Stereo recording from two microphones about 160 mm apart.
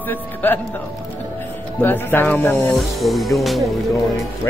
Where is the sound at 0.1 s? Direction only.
10° left (ahead or behind).